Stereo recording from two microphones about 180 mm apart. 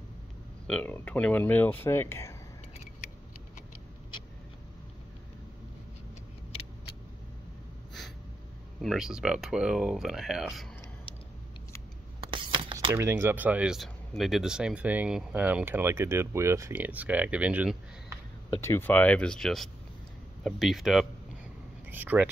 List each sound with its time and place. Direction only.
0.7 s speech: 10° left (ahead or behind)
8.8 s speech: 5° right (ahead or behind)
12.2 s a sound: 25° right (ahead or behind)
12.9 s speech: 10° right (ahead or behind)
18.6 s speech: 15° left (ahead or behind); by 22.3 s 10° right (ahead or behind)